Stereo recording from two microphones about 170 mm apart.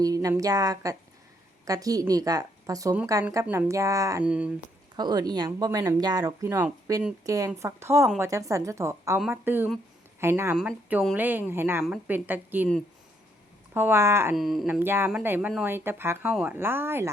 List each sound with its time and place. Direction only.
0.0 s speech: 20° right (ahead or behind)
4.2 s speech: 5° right (ahead or behind)
4.9 s speech: 25° right (ahead or behind)
13.7 s speech: 15° right (ahead or behind)
14.3 s speech: centre (ahead or behind)
14.8 s speech: 10° right (ahead or behind)